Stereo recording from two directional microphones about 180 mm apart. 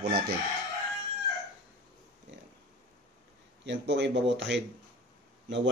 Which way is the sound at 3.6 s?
75° right (ahead or behind).